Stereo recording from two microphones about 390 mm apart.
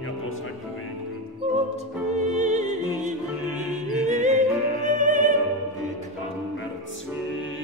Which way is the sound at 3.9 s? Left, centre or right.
Centre.